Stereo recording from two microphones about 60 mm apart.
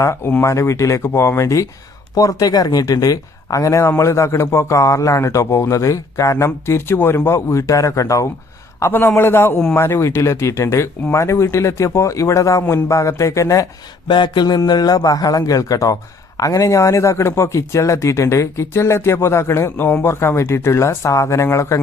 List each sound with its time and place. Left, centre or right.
0.0 s speech: left
0.4 s a man's voice: left
2.1 s speech: left
3.8 s a man's voice: left
6.4 s a man's voice: left
8.9 s a man's voice: left
14.6 s speech: left
19.7 s speech: left